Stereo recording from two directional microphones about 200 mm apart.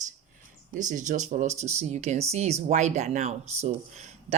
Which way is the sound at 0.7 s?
40° right (ahead or behind).